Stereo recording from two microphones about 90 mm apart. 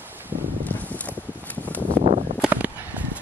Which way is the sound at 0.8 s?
15° left (ahead or behind).